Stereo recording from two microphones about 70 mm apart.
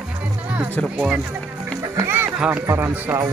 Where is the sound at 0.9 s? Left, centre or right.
Centre.